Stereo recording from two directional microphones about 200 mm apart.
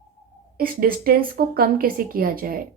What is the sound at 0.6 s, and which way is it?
A woman's voice, 50° right (ahead or behind).